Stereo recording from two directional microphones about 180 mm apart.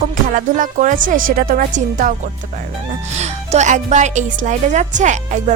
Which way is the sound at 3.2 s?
40° right (ahead or behind).